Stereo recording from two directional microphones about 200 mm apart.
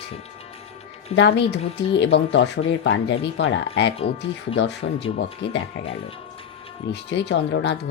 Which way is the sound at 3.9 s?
30° left (ahead or behind).